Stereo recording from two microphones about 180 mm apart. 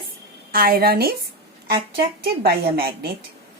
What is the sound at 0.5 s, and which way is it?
Speech, 55° right (ahead or behind).